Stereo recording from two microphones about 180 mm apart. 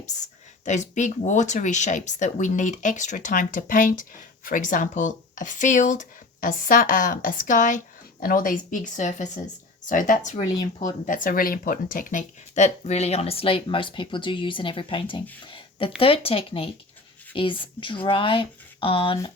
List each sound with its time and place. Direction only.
0.6 s speech: 40° left (ahead or behind)
15.4 s a sound: 30° left (ahead or behind)
16.0 s speech: 30° left (ahead or behind)